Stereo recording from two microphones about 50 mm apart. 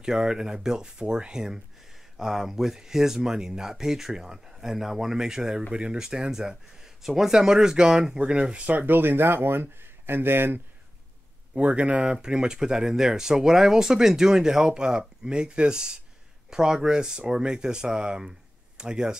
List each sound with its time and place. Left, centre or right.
0.0 s speech: centre; by 10.6 s right
11.5 s speech: right